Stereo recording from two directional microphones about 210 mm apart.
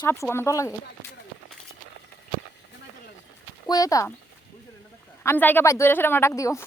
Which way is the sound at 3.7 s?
15° left (ahead or behind).